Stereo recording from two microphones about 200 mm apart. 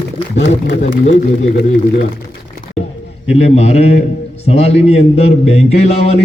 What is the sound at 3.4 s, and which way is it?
A man's voice, 35° left (ahead or behind).